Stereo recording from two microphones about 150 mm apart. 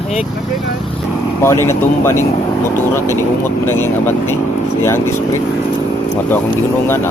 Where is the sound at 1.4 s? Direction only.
15° left (ahead or behind).